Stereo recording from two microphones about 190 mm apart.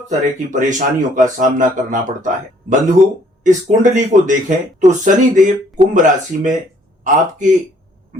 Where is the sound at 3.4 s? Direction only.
40° right (ahead or behind).